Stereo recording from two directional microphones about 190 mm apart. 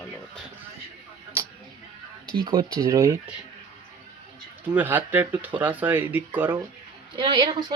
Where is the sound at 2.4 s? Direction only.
20° right (ahead or behind).